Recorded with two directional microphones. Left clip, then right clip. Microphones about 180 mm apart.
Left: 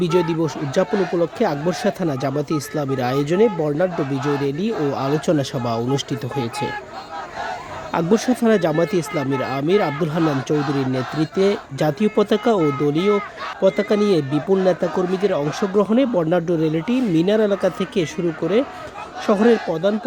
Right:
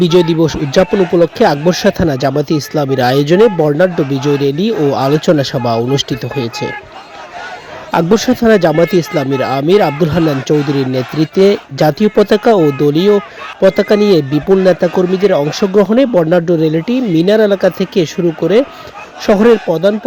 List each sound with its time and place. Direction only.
0.0 s speech: 40° right (ahead or behind)
7.9 s speech: 35° right (ahead or behind)